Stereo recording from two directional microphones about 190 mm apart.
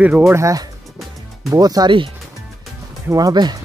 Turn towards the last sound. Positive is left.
turn(degrees=-20)  # may be behind; listen again after turning